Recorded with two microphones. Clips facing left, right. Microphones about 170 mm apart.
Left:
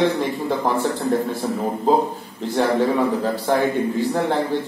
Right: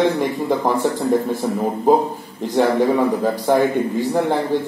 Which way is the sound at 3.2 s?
15° right (ahead or behind).